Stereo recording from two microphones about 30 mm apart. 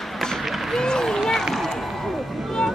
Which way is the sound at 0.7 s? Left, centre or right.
Centre.